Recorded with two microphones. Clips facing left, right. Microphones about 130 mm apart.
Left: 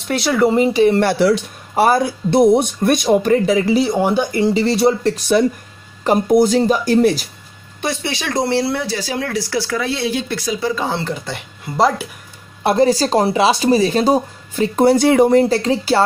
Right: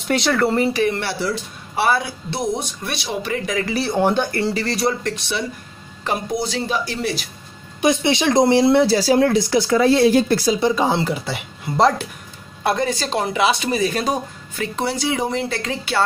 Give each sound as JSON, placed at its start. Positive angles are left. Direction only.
{"t": 0.0, "sound": "speech", "side_deg": 5}
{"t": 1.2, "sound": "speech", "side_deg": 80}
{"t": 1.8, "sound": "speech", "side_deg": 40}
{"t": 3.4, "sound": "speech", "side_deg": 30}
{"t": 3.7, "sound": "speech", "side_deg": 15}
{"t": 5.1, "sound": "speech", "side_deg": 45}
{"t": 7.8, "sound": "speech", "side_deg": -20}
{"t": 8.8, "sound": "speech", "side_deg": -35}
{"t": 9.3, "sound": "speech", "side_deg": -20}
{"t": 9.8, "sound": "speech", "side_deg": -40}
{"t": 10.5, "sound": "speech", "side_deg": -20}
{"t": 12.6, "sound": "speech", "side_deg": 30}
{"t": 14.8, "sound": "speech", "side_deg": 50}
{"t": 15.4, "sound": "speech", "side_deg": 35}